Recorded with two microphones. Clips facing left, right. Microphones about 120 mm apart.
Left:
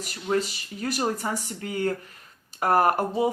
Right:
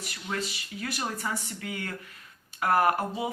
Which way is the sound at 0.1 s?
40° left (ahead or behind).